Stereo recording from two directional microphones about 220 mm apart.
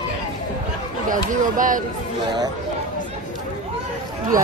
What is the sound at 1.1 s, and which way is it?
Speech, 35° right (ahead or behind).